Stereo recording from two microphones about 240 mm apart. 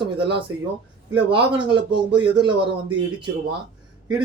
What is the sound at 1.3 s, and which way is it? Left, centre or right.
Speech, right.